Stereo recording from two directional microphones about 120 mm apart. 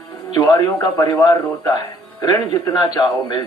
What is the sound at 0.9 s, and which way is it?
A man's voice, 25° left (ahead or behind).